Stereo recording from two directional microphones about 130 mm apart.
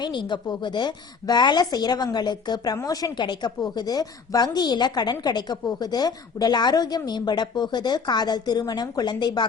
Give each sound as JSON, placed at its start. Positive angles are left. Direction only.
{"t": 0.0, "sound": "a woman's voice", "side_deg": 35}